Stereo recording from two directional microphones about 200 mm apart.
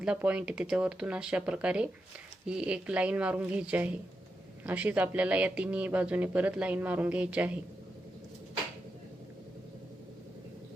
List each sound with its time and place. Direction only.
0.0 s speech: 5° right (ahead or behind)